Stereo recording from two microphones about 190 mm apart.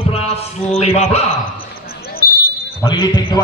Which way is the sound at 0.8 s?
35° left (ahead or behind).